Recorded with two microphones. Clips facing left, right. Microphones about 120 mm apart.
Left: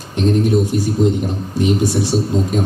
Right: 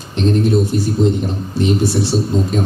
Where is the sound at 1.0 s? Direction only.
15° left (ahead or behind).